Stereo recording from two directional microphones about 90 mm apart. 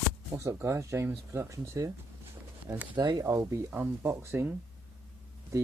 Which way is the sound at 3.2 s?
30° right (ahead or behind).